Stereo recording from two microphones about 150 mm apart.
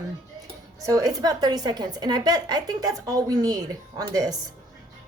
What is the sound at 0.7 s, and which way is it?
A woman's voice, 25° right (ahead or behind).